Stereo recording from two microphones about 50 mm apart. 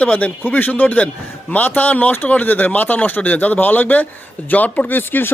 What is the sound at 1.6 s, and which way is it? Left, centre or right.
Speech, left.